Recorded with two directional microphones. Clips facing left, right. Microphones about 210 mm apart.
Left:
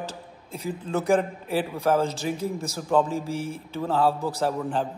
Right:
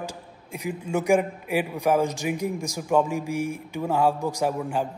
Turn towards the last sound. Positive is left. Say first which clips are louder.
# even
turn(degrees=-10)  # may be behind; listen again after turning